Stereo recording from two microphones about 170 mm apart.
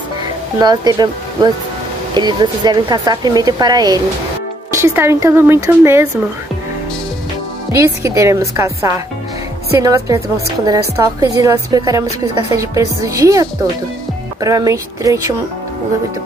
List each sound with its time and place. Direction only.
0.6 s a woman's voice: 25° right (ahead or behind)
7.7 s a woman's voice: 15° right (ahead or behind)